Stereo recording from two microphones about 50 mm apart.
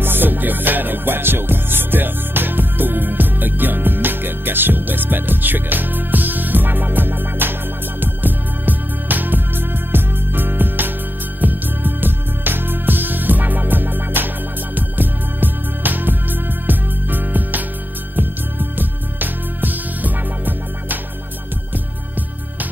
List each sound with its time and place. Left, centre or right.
0.0 s music: right